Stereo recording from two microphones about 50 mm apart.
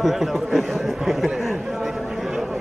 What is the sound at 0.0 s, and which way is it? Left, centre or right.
Speech, centre.